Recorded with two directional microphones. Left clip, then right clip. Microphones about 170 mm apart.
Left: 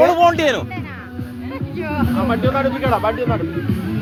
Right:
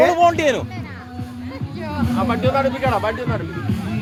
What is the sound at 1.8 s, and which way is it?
Speech, centre (ahead or behind).